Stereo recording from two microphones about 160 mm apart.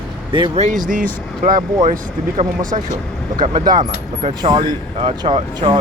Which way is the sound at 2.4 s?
35° right (ahead or behind).